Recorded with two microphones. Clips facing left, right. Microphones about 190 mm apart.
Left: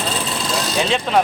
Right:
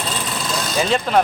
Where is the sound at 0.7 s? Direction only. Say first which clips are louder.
Right 1 dB; centre (ahead or behind).